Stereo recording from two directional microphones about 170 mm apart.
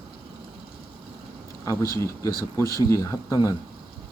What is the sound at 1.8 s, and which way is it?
Speech, 20° left (ahead or behind).